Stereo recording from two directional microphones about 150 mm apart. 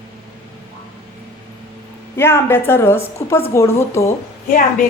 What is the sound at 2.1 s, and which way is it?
A woman's voice, 15° left (ahead or behind).